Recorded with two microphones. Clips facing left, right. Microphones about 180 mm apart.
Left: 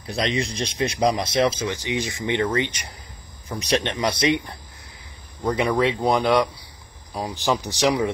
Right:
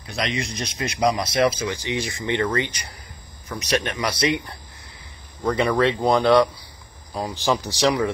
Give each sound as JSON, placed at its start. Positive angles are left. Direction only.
{"t": 0.0, "sound": "speech", "side_deg": 35}
{"t": 5.4, "sound": "speech", "side_deg": 10}
{"t": 7.2, "sound": "speech", "side_deg": 15}